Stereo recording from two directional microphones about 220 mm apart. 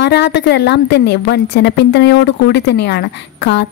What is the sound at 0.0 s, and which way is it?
A woman's voice, 50° left (ahead or behind).